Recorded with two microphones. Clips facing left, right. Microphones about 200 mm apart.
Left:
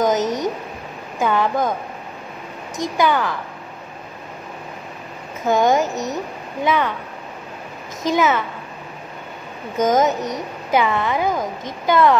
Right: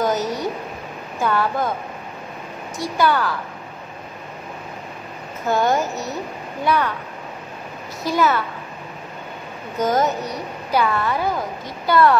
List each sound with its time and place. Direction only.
0.0 s a sound: 20° left (ahead or behind)
1.2 s speech: 15° left (ahead or behind)
2.8 s speech: 20° left (ahead or behind)
5.5 s speech: 15° left (ahead or behind)
8.0 s speech: 20° left (ahead or behind)
9.8 s speech: 20° left (ahead or behind)